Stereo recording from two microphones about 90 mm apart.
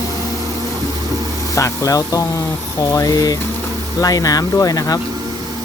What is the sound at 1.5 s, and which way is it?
Speech, 35° left (ahead or behind).